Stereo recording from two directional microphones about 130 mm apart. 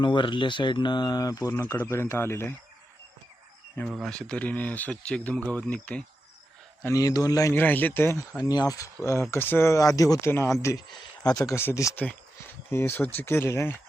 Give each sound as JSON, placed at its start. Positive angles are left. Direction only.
{"t": 0.0, "sound": "speech", "side_deg": 35}
{"t": 3.8, "sound": "speech", "side_deg": -5}
{"t": 4.1, "sound": "speech", "side_deg": 5}
{"t": 6.8, "sound": "speech", "side_deg": 25}
{"t": 7.5, "sound": "speech", "side_deg": 15}
{"t": 8.4, "sound": "speech", "side_deg": 30}
{"t": 9.3, "sound": "speech", "side_deg": 15}